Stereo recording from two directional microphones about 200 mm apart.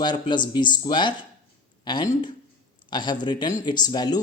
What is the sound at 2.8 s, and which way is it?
Speech, 20° left (ahead or behind).